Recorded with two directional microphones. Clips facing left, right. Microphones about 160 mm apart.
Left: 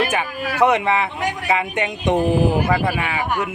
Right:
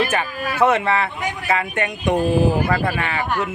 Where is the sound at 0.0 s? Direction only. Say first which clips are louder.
Even; 15° left (ahead or behind).